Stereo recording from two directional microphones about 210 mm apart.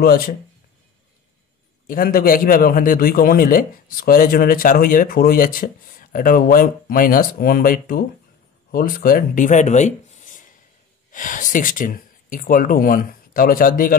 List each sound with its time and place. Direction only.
1.9 s a man's voice: 40° left (ahead or behind)